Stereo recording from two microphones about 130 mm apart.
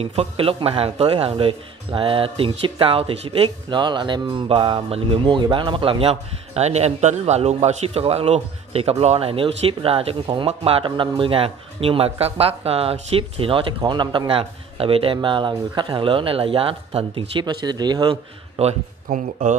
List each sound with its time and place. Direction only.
0.0 s speech: 50° right (ahead or behind); by 18.1 s 30° right (ahead or behind)
18.6 s speech: 50° right (ahead or behind)
19.0 s speech: 75° right (ahead or behind)